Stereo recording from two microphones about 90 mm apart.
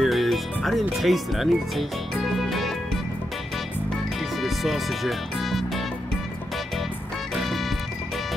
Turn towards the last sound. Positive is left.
turn(degrees=0)  # may be behind; listen again after turning